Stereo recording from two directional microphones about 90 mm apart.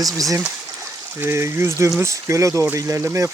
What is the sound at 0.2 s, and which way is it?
Speech, 40° right (ahead or behind).